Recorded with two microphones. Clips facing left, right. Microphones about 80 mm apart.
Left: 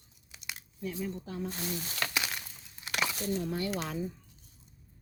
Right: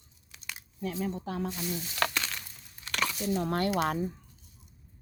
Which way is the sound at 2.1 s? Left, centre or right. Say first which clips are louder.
Even; centre.